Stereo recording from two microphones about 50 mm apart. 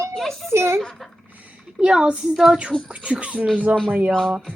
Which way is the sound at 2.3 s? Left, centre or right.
Centre.